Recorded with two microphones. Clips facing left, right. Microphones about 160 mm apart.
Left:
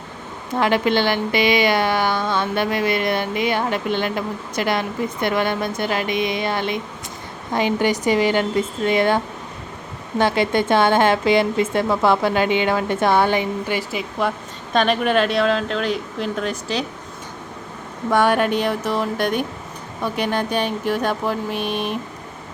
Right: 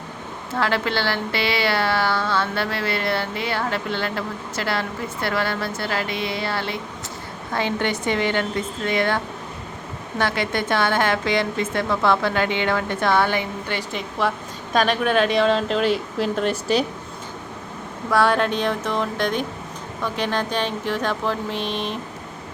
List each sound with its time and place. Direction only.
0.5 s speech: 15° left (ahead or behind)
14.2 s a woman's voice: centre (ahead or behind)
18.1 s speech: 15° left (ahead or behind)